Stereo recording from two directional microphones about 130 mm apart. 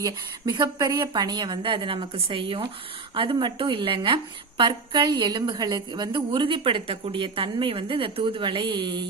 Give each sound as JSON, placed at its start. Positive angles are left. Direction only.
{"t": 0.0, "sound": "a woman's voice", "side_deg": -30}